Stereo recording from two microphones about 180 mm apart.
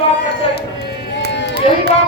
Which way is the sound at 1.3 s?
75° left (ahead or behind).